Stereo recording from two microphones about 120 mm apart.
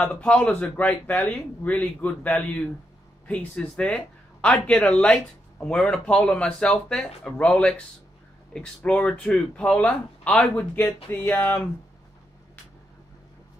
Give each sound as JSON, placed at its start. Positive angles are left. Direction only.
{"t": 0.0, "sound": "a man's voice", "side_deg": 10}